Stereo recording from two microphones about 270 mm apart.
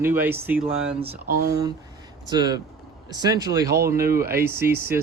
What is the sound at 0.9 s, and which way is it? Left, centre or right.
Speech, right.